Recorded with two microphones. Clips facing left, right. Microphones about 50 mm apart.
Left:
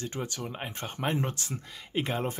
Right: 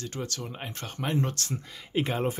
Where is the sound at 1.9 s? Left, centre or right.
Centre.